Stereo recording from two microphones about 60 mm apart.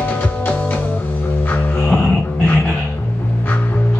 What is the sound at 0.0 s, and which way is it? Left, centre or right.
Music, left.